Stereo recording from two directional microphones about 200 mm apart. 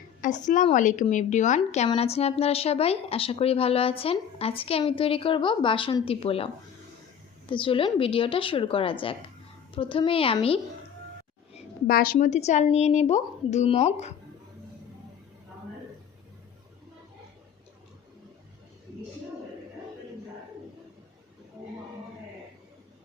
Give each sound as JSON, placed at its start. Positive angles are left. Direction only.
{"t": 0.2, "sound": "a woman's voice", "side_deg": 40}
{"t": 11.9, "sound": "a woman's voice", "side_deg": 45}